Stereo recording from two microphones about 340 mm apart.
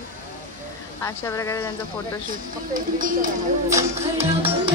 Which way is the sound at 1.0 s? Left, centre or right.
Centre.